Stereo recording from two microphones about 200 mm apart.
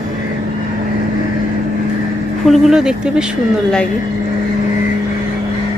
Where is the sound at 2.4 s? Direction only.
Centre (ahead or behind).